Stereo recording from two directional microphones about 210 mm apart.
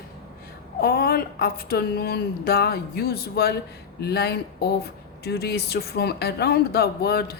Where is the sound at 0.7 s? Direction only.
45° left (ahead or behind).